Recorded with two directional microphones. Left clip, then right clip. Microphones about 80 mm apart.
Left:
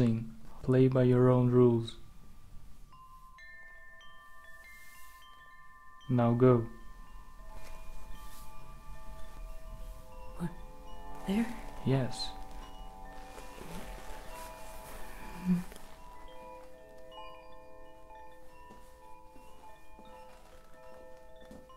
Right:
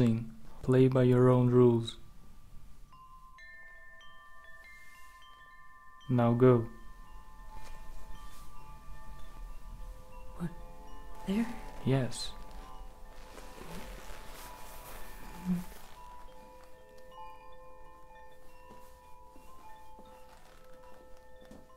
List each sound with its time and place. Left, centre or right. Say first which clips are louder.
0.0 s speech: right 1 dB; right
3.3 s wind chime: even; centre
6.0 s speech: right 1 dB; right
10.4 s speech: even; centre
11.8 s speech: even; right
13.4 s music: right 2 dB; centre